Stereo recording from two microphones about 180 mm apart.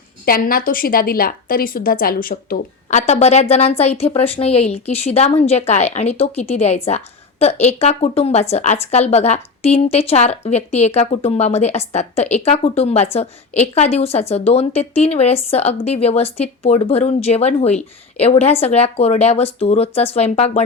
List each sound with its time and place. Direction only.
0.3 s a woman's voice: 55° left (ahead or behind)
3.1 s speech: 35° left (ahead or behind)